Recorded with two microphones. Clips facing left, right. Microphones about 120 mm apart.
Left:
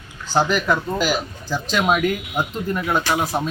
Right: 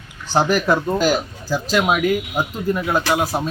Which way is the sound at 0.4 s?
45° right (ahead or behind).